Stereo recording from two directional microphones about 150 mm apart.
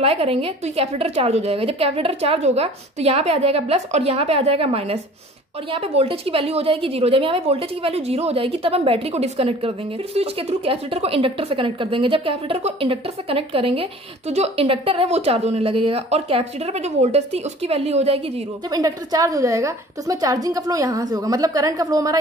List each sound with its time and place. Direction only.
0.0 s a woman's voice: 40° right (ahead or behind)
18.7 s a woman's voice: 25° right (ahead or behind)